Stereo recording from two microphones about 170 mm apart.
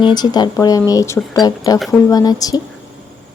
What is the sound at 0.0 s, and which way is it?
Speech, 25° left (ahead or behind).